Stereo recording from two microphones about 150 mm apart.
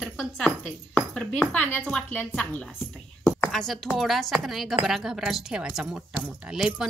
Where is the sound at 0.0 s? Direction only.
Centre (ahead or behind).